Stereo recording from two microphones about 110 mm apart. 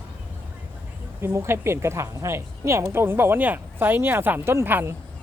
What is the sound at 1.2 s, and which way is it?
A woman's voice, 20° right (ahead or behind).